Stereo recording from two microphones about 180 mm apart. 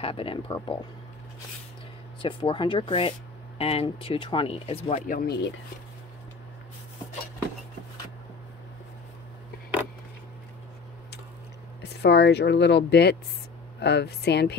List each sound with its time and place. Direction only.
0.0 s speech: 30° left (ahead or behind)
2.2 s speech: 30° left (ahead or behind); by 5.5 s 60° left (ahead or behind)
11.8 s speech: 65° left (ahead or behind)